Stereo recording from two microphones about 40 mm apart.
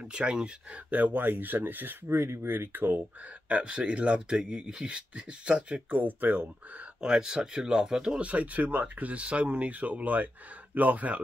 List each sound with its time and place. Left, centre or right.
0.1 s speech: right
0.8 s speech: right
2.0 s speech: right
3.6 s speech: right
4.4 s speech: centre
5.9 s speech: right
7.0 s speech: centre
8.2 s speech: right